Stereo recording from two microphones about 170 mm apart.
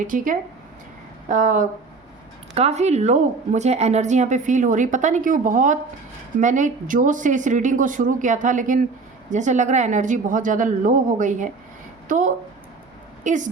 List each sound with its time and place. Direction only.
0.0 s a woman's voice: 50° right (ahead or behind)